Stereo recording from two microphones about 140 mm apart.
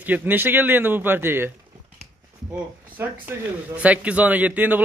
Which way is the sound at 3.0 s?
20° right (ahead or behind).